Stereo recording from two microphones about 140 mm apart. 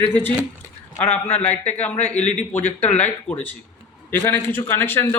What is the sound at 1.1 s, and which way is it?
Speech, 50° left (ahead or behind).